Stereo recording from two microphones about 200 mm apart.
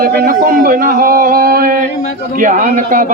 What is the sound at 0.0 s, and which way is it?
A man's voice, 50° right (ahead or behind).